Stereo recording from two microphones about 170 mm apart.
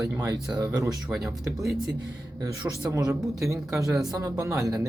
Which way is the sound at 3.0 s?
5° right (ahead or behind).